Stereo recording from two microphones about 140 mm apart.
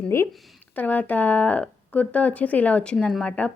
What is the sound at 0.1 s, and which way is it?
A woman's voice, 20° left (ahead or behind).